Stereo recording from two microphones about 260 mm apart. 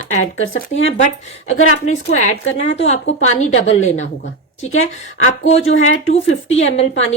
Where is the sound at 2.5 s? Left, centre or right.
Left.